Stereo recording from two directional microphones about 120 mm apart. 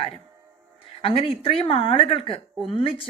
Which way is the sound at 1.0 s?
55° left (ahead or behind).